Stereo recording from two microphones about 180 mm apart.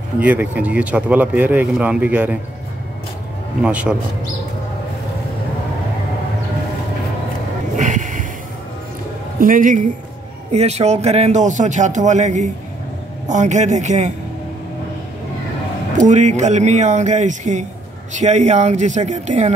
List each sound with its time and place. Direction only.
0.2 s speech: 10° right (ahead or behind)
3.6 s speech: 5° right (ahead or behind)
7.7 s a sound: 45° right (ahead or behind)
9.4 s speech: 50° right (ahead or behind)
10.5 s a man's voice: 35° right (ahead or behind)
16.0 s a man's voice: 40° right (ahead or behind)